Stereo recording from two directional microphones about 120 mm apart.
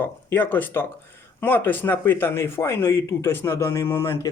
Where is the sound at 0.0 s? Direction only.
15° left (ahead or behind).